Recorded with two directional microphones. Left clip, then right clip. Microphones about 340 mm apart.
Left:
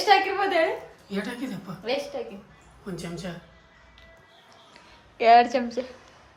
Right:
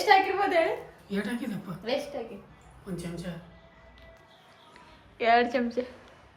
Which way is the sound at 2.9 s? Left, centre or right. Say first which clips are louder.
Left 3 dB; left.